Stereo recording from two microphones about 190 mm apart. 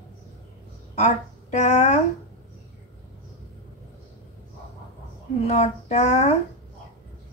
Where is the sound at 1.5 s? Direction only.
35° left (ahead or behind).